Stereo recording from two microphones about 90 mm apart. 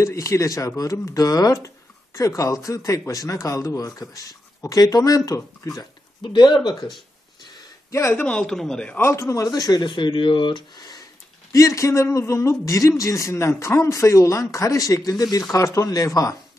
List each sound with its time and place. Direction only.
0.0 s a man's voice: 35° left (ahead or behind)
6.2 s speech: 55° left (ahead or behind)
7.9 s a man's voice: 30° left (ahead or behind)
8.2 s speech: 10° left (ahead or behind)
8.9 s speech: 30° left (ahead or behind); by 11.1 s 50° left (ahead or behind)
11.5 s a man's voice: 35° left (ahead or behind)